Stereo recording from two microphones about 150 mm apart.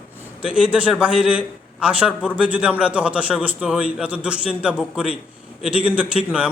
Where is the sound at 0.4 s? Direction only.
5° right (ahead or behind).